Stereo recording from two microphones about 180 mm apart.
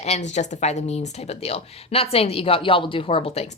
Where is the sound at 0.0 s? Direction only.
40° left (ahead or behind).